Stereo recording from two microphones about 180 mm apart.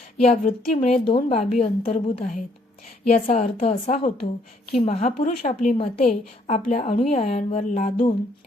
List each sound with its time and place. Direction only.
0.3 s a woman's voice: 40° left (ahead or behind)